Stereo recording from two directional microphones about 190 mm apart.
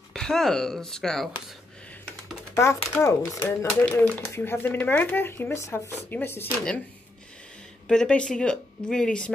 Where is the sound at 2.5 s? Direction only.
15° left (ahead or behind).